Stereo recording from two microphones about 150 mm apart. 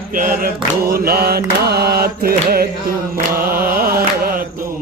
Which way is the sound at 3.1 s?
75° right (ahead or behind).